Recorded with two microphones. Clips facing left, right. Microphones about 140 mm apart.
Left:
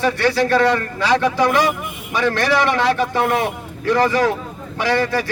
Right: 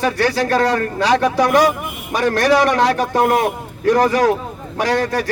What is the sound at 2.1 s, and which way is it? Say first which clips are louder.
A man's voice: right 3 dB; 40° right (ahead or behind).